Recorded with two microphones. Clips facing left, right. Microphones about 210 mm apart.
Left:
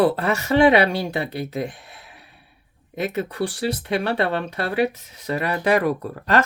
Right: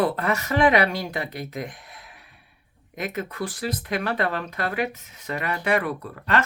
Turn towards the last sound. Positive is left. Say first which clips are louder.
# left 4 dB
turn(degrees=40)  # may be behind; listen again after turning